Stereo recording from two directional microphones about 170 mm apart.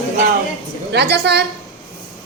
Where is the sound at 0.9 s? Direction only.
80° right.